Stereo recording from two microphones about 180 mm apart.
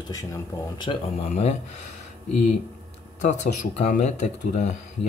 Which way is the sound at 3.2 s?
40° left (ahead or behind).